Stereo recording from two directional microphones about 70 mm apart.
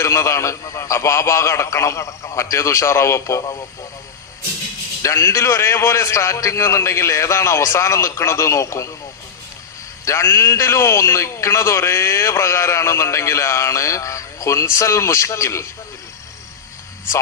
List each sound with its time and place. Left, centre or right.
0.0 s a man's voice: left
5.0 s a man's voice: left
10.1 s a man's voice: left